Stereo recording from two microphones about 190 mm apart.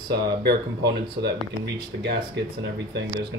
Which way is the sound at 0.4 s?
60° right (ahead or behind).